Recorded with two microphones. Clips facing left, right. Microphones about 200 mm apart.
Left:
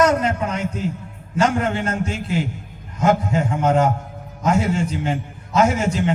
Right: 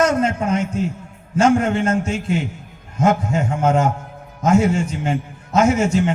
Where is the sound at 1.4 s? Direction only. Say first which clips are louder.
Right 4 dB; 45° right (ahead or behind).